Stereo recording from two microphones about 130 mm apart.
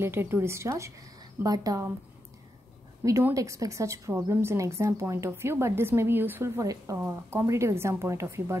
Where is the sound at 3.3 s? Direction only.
25° right (ahead or behind).